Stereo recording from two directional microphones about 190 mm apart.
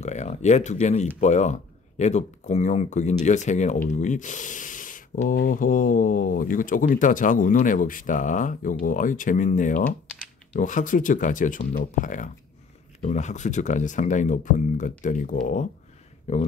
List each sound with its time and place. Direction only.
0.0 s speech: 40° left (ahead or behind)